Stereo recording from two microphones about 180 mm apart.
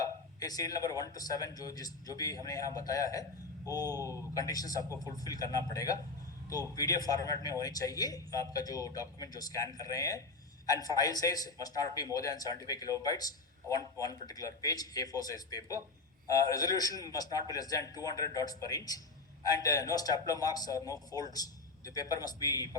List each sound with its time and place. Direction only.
0.0 s speech: 20° left (ahead or behind)